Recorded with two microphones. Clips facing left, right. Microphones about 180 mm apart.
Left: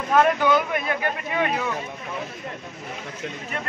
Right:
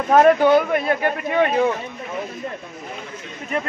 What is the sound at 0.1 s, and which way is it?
Speech, 45° right (ahead or behind).